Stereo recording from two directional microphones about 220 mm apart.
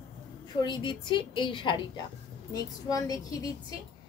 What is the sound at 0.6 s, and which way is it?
A woman's voice, 20° left (ahead or behind).